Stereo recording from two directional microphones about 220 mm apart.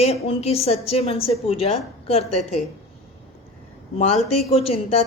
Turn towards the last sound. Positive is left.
turn(degrees=25)  # may be behind; listen again after turning